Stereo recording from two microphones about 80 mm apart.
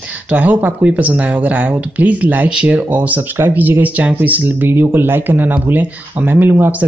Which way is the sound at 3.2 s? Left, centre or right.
Right.